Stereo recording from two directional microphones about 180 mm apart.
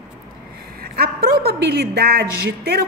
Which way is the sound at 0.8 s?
60° right (ahead or behind).